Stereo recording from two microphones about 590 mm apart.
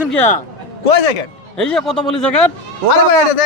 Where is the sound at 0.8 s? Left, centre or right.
Left.